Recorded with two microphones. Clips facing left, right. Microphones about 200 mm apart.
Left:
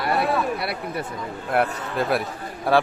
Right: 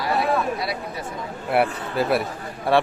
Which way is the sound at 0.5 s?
60° left (ahead or behind).